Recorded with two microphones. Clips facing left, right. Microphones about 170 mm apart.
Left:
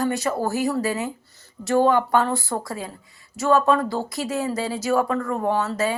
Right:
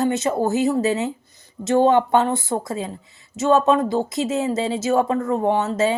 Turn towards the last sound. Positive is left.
turn(degrees=-20)  # may be behind; listen again after turning